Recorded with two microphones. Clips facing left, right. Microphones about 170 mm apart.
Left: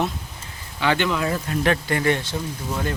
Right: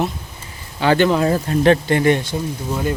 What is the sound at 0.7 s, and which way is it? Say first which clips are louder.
Speech: right 7 dB; 40° right (ahead or behind).